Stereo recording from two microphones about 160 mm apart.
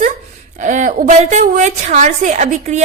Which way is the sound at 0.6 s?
50° right (ahead or behind).